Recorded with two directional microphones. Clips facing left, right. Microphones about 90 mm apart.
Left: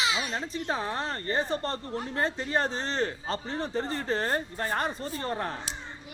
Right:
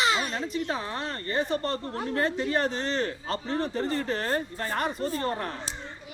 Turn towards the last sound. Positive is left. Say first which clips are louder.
# right 5 dB
turn(degrees=-40)  # may be behind; listen again after turning